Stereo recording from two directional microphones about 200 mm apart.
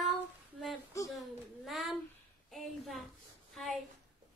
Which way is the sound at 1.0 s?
Centre (ahead or behind).